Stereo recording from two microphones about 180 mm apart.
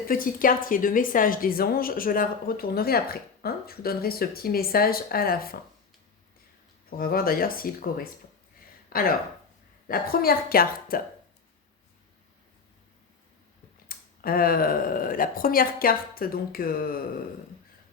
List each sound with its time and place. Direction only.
0.1 s a woman's voice: 50° left (ahead or behind)
6.9 s a woman's voice: 55° left (ahead or behind)
13.8 s speech: 55° left (ahead or behind)